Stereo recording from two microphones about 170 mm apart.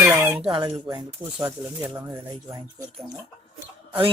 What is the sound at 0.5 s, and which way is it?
Speech, 25° right (ahead or behind).